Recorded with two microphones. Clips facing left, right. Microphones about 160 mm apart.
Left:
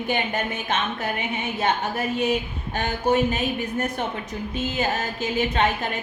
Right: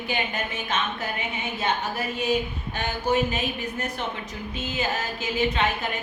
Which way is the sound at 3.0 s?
50° left (ahead or behind).